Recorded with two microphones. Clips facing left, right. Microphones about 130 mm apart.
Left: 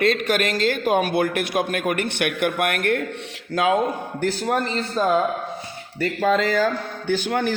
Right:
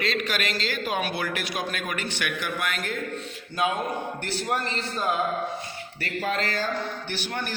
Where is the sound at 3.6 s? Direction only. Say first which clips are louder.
Left 5 dB; 90° left.